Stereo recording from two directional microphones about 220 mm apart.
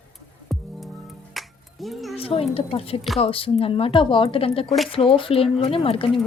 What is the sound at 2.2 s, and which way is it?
Speech, 25° left (ahead or behind).